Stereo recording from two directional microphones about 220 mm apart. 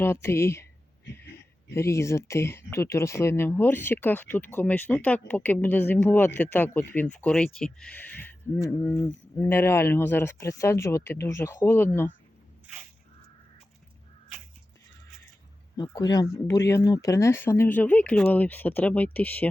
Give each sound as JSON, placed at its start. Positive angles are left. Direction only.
{"t": 0.0, "sound": "speech", "side_deg": 10}
{"t": 1.7, "sound": "speech", "side_deg": 10}
{"t": 15.7, "sound": "speech", "side_deg": 20}